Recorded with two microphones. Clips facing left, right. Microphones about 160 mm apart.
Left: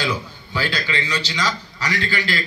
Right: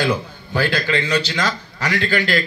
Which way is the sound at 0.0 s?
50° right (ahead or behind).